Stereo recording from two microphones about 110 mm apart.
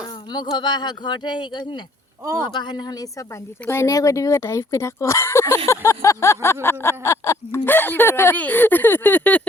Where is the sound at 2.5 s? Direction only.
45° left (ahead or behind).